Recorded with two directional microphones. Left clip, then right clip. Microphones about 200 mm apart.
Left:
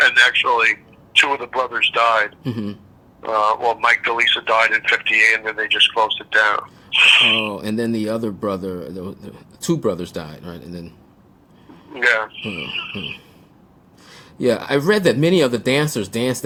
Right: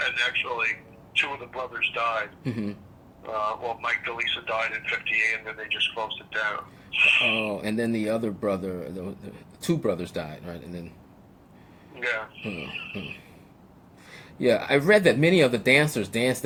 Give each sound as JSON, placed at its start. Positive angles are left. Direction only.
{"t": 0.0, "sound": "a man's voice", "side_deg": 50}
{"t": 2.4, "sound": "speech", "side_deg": 30}
{"t": 3.2, "sound": "speech", "side_deg": 45}
{"t": 7.5, "sound": "speech", "side_deg": 25}
{"t": 11.9, "sound": "speech", "side_deg": 45}
{"t": 14.1, "sound": "speech", "side_deg": 30}